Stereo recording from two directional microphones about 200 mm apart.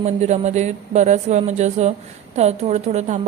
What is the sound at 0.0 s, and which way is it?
A woman's voice, 35° right (ahead or behind).